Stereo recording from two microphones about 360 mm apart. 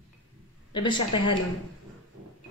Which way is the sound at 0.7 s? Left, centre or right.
Centre.